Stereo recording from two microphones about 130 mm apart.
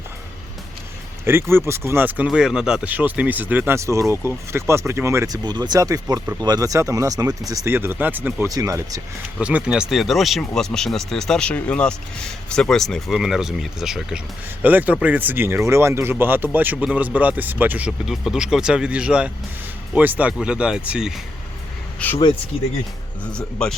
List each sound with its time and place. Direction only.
1.2 s speech: 20° right (ahead or behind)
8.4 s speech: 25° right (ahead or behind)
9.4 s speech: 10° right (ahead or behind)
21.9 s speech: 15° left (ahead or behind)
23.2 s speech: 5° left (ahead or behind)